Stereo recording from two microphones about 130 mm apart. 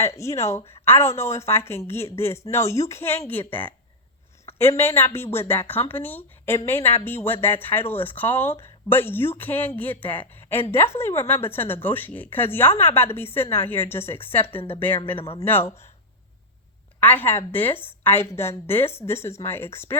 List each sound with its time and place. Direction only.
0.0 s a woman's voice: 20° left (ahead or behind)
17.0 s a woman's voice: 15° left (ahead or behind)